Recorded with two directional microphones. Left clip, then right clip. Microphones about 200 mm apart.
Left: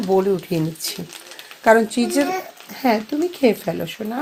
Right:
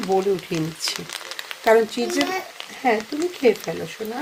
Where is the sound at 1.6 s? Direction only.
15° left (ahead or behind).